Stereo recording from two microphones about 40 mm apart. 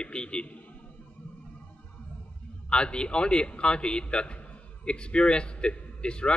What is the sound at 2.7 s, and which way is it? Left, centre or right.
A man's voice, left.